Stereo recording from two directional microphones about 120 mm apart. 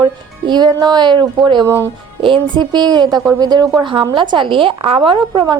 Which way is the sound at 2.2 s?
40° right (ahead or behind).